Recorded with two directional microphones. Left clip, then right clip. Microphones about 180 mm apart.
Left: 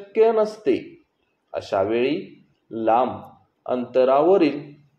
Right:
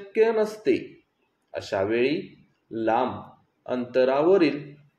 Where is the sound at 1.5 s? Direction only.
10° left (ahead or behind).